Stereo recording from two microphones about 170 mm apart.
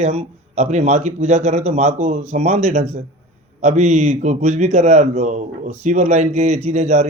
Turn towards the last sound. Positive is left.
turn(degrees=-45)  # may be behind; listen again after turning